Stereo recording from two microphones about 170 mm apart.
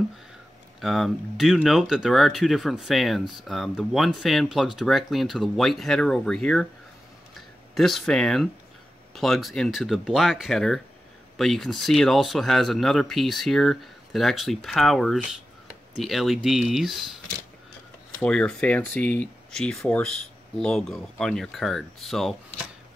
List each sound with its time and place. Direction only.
0.7 s speech: centre (ahead or behind)
7.7 s speech: centre (ahead or behind)
18.2 s speech: 5° left (ahead or behind)